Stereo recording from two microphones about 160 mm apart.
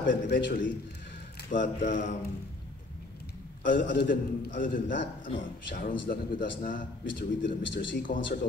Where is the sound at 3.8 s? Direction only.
75° left (ahead or behind).